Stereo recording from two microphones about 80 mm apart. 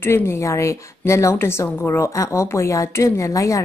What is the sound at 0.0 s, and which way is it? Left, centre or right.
A woman's voice, left.